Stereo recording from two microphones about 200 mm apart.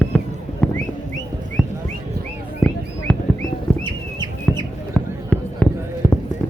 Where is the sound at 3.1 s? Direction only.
5° left (ahead or behind).